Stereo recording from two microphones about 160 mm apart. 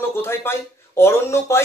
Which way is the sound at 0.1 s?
15° left (ahead or behind).